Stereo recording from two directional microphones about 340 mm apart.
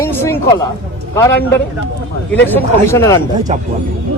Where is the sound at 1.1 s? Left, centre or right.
Centre.